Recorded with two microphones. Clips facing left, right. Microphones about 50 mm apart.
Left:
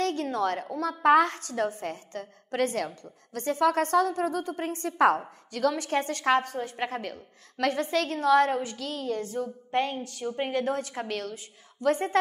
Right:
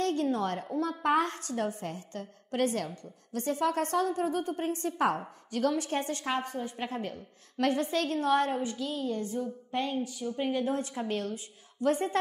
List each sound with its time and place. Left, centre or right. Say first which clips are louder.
0.0 s a sound: left 2 dB; left
0.7 s a woman's voice: left 6 dB; left
10.2 s a woman's voice: left 4 dB; left
10.5 s a woman's voice: left 2 dB; left